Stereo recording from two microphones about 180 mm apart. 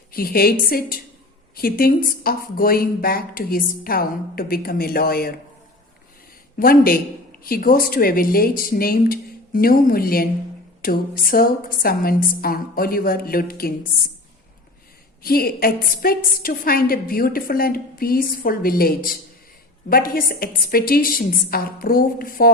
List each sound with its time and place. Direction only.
0.1 s a woman's voice: 55° left (ahead or behind)
6.6 s a woman's voice: 55° left (ahead or behind)
15.2 s a woman's voice: 55° left (ahead or behind)